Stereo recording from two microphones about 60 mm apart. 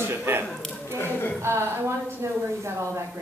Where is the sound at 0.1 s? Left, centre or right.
Right.